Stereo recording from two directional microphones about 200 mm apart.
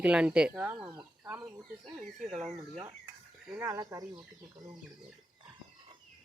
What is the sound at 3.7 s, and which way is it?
Speech, 15° right (ahead or behind).